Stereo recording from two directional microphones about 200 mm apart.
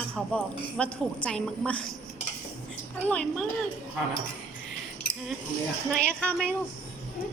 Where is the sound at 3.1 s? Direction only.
5° left (ahead or behind).